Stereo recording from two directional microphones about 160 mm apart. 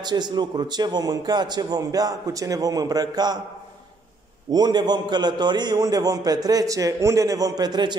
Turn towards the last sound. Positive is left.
turn(degrees=-25)  # may be behind; listen again after turning